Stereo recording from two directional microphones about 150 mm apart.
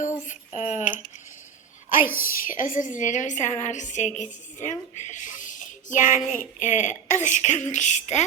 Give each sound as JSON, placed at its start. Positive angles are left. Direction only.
{"t": 0.3, "sound": "speech", "side_deg": 50}
{"t": 2.0, "sound": "a child's voice", "side_deg": -15}
{"t": 2.2, "sound": "a woman's voice", "side_deg": 65}